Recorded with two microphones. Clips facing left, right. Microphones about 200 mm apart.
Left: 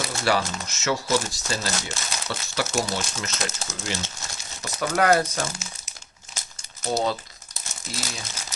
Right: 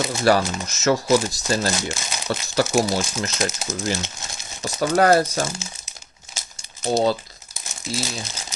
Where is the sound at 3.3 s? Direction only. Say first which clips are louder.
Right 6 dB; 15° right (ahead or behind).